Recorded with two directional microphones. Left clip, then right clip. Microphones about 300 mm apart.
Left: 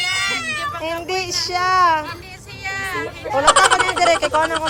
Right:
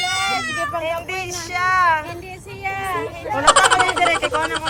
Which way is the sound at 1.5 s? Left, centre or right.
Centre.